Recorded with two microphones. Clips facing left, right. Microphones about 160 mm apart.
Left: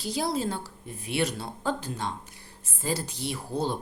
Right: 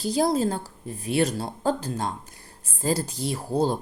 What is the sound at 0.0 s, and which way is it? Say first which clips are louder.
Speech: right 6 dB; 45° right (ahead or behind).